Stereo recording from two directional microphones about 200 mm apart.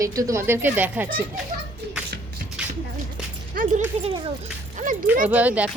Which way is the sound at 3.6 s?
45° right (ahead or behind).